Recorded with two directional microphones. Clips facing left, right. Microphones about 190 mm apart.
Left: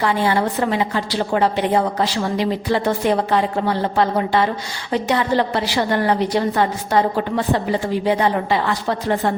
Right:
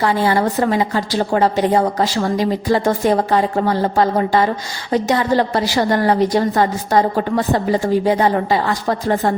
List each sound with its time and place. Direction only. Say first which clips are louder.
0.0 s a woman's voice: right 2 dB; 40° right (ahead or behind)